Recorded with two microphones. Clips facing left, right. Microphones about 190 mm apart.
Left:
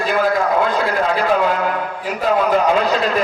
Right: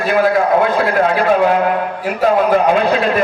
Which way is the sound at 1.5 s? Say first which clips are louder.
Right 5 dB; 55° right (ahead or behind).